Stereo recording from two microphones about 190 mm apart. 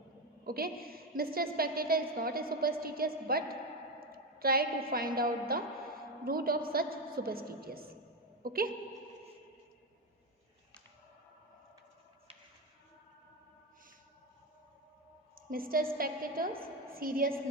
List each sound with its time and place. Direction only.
0.4 s a woman's voice: 50° right (ahead or behind)
15.4 s a woman's voice: 50° right (ahead or behind)